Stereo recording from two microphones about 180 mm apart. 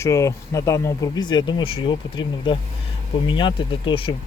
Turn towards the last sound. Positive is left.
turn(degrees=30)  # may be behind; listen again after turning